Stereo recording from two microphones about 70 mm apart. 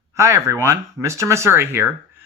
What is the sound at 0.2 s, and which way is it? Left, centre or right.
Speech, right.